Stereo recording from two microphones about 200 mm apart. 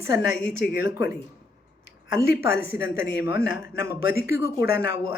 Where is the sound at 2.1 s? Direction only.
10° right (ahead or behind).